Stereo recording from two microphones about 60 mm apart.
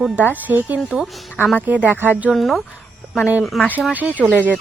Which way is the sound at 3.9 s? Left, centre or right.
Right.